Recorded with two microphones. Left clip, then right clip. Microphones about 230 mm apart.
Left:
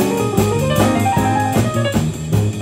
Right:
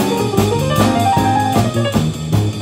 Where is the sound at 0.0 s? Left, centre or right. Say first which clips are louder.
Right 1 dB; centre.